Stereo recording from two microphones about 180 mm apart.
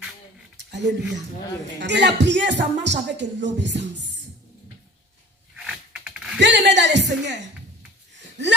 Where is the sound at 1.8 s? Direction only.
70° right (ahead or behind).